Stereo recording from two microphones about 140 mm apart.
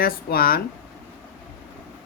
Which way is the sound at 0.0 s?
90° left.